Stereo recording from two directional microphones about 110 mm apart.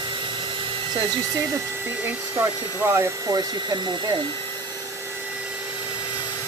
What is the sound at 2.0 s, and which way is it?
Speech, 20° right (ahead or behind).